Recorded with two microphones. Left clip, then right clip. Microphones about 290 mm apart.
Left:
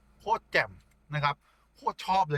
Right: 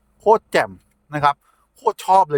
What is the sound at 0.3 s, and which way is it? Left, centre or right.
A man's voice, right.